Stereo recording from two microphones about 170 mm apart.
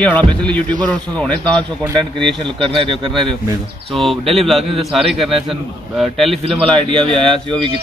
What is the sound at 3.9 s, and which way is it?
A man's voice, centre (ahead or behind).